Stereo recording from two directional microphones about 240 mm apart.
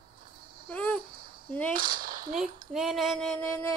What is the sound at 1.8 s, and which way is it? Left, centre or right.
Speech, right.